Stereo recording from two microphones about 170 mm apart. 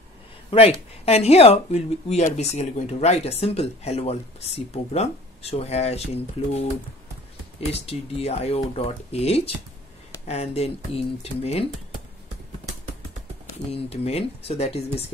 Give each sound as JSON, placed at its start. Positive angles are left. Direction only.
{"t": 0.5, "sound": "speech", "side_deg": 35}
{"t": 7.7, "sound": "speech", "side_deg": 35}
{"t": 13.7, "sound": "speech", "side_deg": 35}